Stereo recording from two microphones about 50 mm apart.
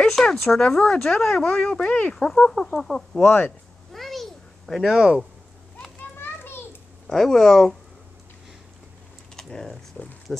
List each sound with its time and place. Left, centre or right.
0.2 s speech: centre
1.5 s speech: centre
2.1 s speech: centre
3.9 s a sound: centre
4.9 s speech: centre
6.1 s children playing: left
7.1 s speech: centre
9.4 s speech: centre